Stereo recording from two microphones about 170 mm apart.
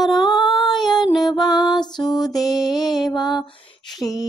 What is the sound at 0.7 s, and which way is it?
Female singing, centre (ahead or behind).